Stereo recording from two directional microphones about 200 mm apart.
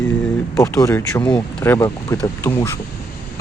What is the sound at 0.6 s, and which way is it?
Speech, 15° left (ahead or behind).